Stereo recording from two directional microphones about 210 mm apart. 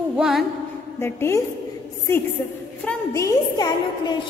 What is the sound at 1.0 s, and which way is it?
Speech, 10° left (ahead or behind).